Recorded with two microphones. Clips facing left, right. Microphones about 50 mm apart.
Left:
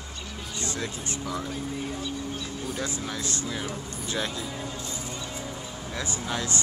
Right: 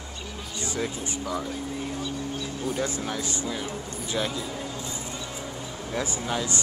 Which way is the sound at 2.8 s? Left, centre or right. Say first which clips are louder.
Right 3 dB; right.